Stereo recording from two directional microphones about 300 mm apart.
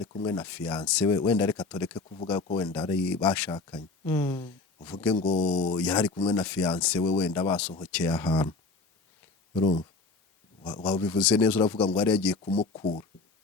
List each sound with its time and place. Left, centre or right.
0.3 s speech: centre
2.5 s speech: centre
2.7 s speech: centre
6.1 s speech: centre
6.3 s speech: centre
8.1 s speech: centre
9.6 s speech: centre
11.2 s speech: centre
12.5 s speech: centre